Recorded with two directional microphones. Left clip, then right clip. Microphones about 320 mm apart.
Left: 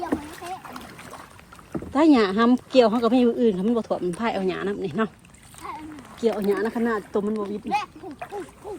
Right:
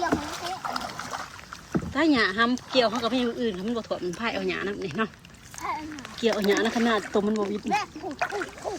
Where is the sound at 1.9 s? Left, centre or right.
Centre.